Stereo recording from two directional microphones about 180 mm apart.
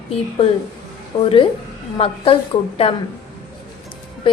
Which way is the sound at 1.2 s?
30° left (ahead or behind).